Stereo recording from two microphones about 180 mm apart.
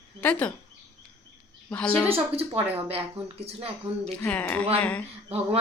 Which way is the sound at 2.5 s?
10° right (ahead or behind).